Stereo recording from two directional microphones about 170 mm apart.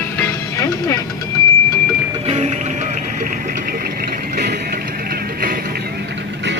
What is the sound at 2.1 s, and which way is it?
Music, 40° right (ahead or behind).